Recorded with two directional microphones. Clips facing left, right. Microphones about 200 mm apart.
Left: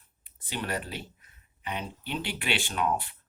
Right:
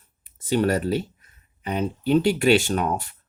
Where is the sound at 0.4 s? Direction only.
45° right (ahead or behind).